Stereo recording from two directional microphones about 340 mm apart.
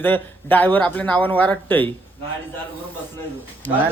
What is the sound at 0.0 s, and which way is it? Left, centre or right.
Speech, centre.